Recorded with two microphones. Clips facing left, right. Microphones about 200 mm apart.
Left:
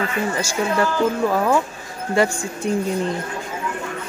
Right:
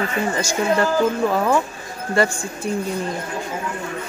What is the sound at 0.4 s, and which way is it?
Speech, 10° left (ahead or behind).